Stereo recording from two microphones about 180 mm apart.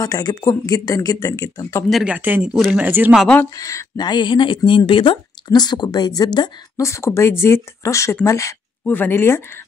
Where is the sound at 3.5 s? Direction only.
15° left (ahead or behind).